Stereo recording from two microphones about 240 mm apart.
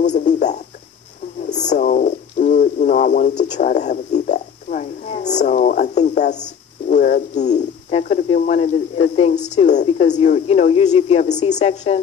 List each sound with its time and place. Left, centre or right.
0.1 s speech: left